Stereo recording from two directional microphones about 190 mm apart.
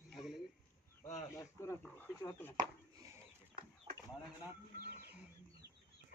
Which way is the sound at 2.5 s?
20° right (ahead or behind).